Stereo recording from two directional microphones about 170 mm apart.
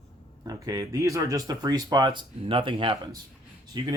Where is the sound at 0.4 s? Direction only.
20° right (ahead or behind).